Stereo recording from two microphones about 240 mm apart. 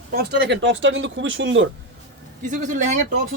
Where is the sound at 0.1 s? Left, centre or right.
Right.